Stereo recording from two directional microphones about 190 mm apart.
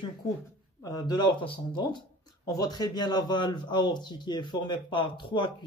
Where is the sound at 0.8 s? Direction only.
20° left (ahead or behind).